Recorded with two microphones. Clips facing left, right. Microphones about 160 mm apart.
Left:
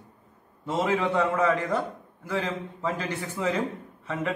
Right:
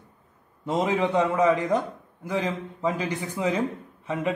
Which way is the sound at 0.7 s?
20° right (ahead or behind).